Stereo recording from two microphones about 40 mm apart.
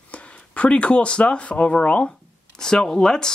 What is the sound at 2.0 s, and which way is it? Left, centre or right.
Speech, centre.